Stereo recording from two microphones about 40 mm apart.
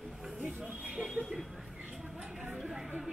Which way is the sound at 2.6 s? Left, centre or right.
Centre.